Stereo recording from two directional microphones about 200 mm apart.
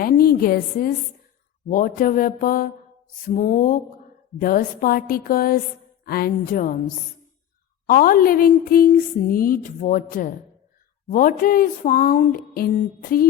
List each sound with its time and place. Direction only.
0.0 s a woman's voice: 50° left (ahead or behind)
3.2 s a sound: 40° left (ahead or behind)
4.4 s speech: 45° left (ahead or behind)
7.9 s speech: 45° left (ahead or behind)